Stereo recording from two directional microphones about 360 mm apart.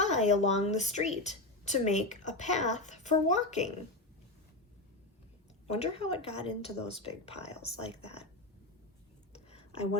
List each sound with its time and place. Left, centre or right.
0.0 s a woman's voice: centre
5.6 s a woman's voice: centre
9.5 s a sound: centre